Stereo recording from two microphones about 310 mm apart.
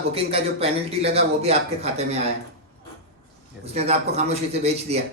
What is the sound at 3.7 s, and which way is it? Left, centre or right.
Speech, centre.